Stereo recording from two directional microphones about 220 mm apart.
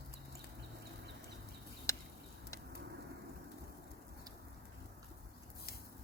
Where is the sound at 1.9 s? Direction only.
15° left (ahead or behind).